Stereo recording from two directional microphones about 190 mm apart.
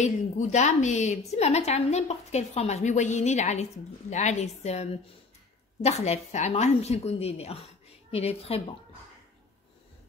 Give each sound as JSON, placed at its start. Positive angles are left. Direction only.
{"t": 0.0, "sound": "a woman's voice", "side_deg": 40}